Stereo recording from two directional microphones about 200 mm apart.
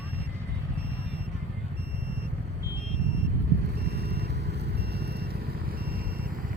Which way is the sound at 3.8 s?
55° right (ahead or behind).